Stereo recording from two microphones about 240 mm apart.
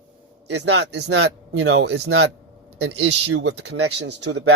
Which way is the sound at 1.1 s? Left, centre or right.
Right.